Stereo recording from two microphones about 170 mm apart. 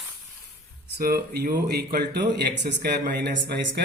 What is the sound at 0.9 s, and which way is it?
Speech, 65° right (ahead or behind).